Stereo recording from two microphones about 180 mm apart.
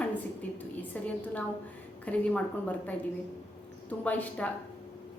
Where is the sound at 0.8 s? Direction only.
10° left (ahead or behind).